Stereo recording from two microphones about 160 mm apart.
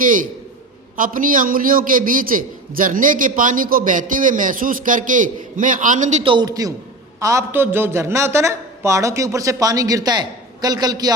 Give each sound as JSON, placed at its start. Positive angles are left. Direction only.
{"t": 0.9, "sound": "a man's voice", "side_deg": -60}
{"t": 6.2, "sound": "a man's voice", "side_deg": -25}